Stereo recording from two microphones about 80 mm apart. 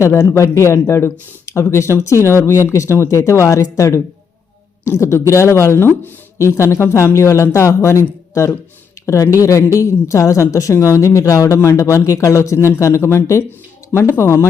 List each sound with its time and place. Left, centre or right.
0.0 s speech: left